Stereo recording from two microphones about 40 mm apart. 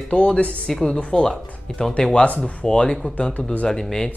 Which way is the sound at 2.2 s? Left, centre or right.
Left.